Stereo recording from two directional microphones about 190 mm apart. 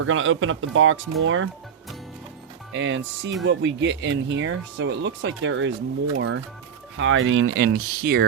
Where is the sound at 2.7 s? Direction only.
70° right (ahead or behind).